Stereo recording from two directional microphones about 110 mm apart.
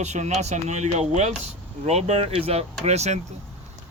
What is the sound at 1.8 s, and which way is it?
Speech, 75° right (ahead or behind).